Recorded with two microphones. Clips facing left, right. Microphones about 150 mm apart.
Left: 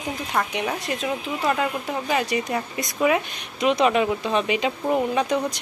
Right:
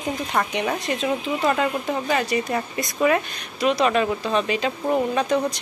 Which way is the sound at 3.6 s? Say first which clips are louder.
Even; 20° left (ahead or behind).